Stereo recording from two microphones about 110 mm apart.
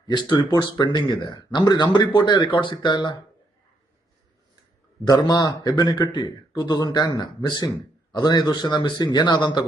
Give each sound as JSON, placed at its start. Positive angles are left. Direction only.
{"t": 0.1, "sound": "speech", "side_deg": 45}
{"t": 5.0, "sound": "a man's voice", "side_deg": 40}